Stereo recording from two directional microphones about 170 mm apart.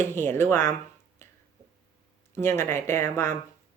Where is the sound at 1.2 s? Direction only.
15° left (ahead or behind).